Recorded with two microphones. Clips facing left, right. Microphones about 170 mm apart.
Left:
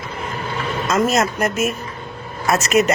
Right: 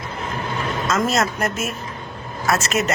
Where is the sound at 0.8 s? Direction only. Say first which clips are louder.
Left 3 dB; 15° left (ahead or behind).